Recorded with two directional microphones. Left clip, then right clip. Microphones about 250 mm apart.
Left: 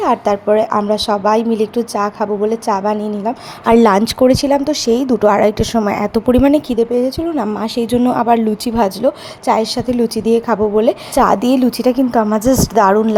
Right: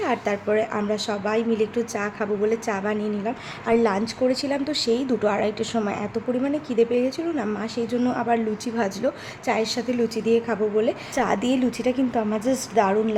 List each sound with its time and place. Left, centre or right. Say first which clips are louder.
0.0 s a woman's voice: left 10 dB; centre
3.8 s a woman's voice: left 12 dB; left
6.7 s a woman's voice: left 6 dB; centre